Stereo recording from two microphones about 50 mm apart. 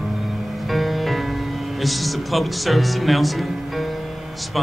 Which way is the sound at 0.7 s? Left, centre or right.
Centre.